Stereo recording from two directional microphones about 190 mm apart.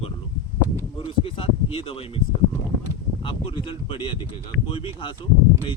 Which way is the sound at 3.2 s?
30° left (ahead or behind).